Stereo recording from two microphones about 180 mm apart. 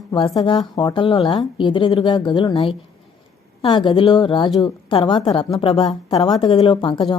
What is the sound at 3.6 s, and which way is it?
A woman's voice, 30° left (ahead or behind).